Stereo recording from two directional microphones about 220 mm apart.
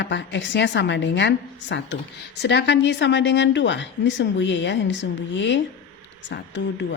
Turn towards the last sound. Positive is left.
turn(degrees=55)  # may be behind; listen again after turning